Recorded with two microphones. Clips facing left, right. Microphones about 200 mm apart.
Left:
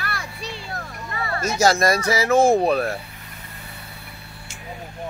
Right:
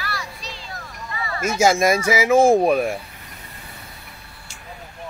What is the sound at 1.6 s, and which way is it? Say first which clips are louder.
Speech: right 2 dB; 10° right (ahead or behind).